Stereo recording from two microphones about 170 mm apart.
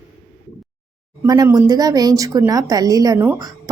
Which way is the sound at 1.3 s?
20° right (ahead or behind).